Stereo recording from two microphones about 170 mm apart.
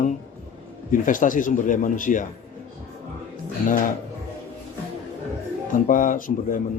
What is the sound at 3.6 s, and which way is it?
Speech, 50° left (ahead or behind).